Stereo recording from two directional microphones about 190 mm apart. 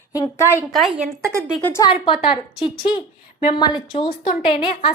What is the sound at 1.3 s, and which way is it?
Speech, 15° right (ahead or behind).